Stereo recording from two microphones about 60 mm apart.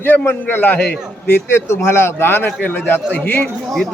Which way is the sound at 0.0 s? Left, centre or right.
Left.